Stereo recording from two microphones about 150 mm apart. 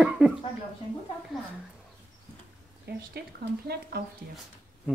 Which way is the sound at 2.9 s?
90° right.